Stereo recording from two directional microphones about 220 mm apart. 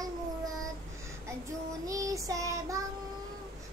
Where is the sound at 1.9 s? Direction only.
15° right (ahead or behind).